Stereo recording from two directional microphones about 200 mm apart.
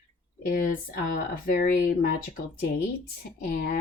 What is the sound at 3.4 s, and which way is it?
Speech, 45° left (ahead or behind).